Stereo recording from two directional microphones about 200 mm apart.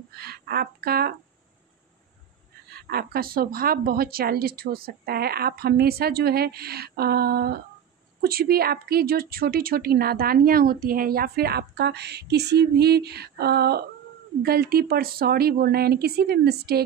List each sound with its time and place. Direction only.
0.1 s speech: 50° right (ahead or behind)
2.7 s a woman's voice: 50° right (ahead or behind)